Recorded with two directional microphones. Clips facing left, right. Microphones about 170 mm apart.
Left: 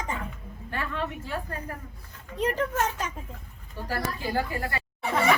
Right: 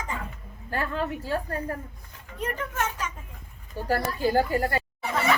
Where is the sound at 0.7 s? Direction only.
40° right (ahead or behind).